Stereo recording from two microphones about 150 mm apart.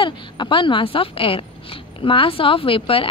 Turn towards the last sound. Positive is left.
turn(degrees=40)  # may be behind; listen again after turning